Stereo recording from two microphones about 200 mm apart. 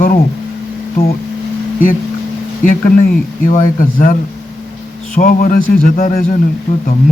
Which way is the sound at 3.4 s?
40° left (ahead or behind).